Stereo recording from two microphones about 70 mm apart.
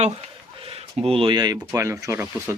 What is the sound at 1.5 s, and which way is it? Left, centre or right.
Speech, right.